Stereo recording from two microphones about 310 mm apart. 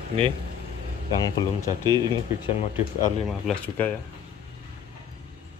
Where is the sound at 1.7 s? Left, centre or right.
Centre.